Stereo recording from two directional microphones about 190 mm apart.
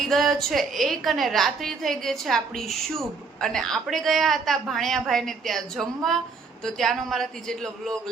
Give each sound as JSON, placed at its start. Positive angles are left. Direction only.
{"t": 0.0, "sound": "a woman's voice", "side_deg": 0}